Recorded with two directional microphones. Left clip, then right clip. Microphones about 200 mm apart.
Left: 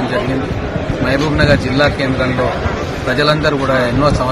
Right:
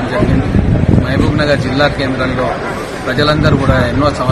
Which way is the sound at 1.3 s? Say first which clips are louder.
Right 1 dB; 5° left (ahead or behind).